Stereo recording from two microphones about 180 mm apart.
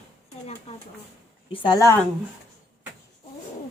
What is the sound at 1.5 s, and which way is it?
Speech, 20° left (ahead or behind).